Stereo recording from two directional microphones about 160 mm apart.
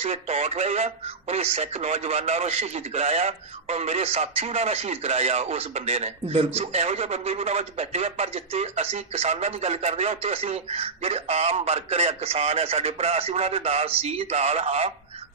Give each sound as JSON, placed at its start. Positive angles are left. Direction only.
{"t": 0.0, "sound": "speech", "side_deg": -40}